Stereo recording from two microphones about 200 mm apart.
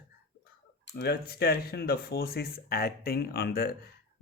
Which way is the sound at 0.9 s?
55° left (ahead or behind).